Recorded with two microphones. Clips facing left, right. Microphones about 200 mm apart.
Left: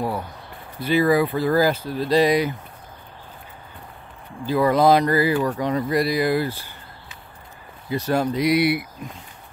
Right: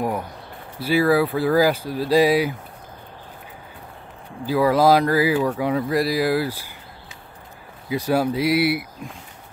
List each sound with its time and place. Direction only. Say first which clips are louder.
0.7 s speech: even; 5° right (ahead or behind)
4.5 s speech: even; 5° right (ahead or behind)
7.9 s speech: right 1 dB; 10° right (ahead or behind)